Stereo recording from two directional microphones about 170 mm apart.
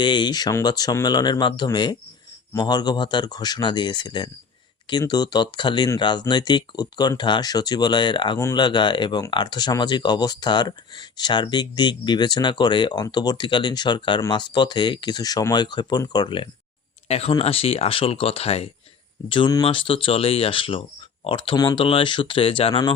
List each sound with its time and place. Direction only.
0.0 s speech: 25° left (ahead or behind)
19.3 s speech: 25° left (ahead or behind)